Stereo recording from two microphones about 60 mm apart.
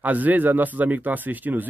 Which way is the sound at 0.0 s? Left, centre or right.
Right.